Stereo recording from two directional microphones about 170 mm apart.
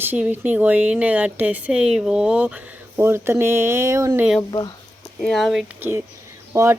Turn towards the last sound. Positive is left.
turn(degrees=-20)  # may be behind; listen again after turning